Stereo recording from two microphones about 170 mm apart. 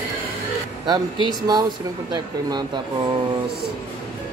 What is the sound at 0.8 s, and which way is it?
Speech, 25° right (ahead or behind).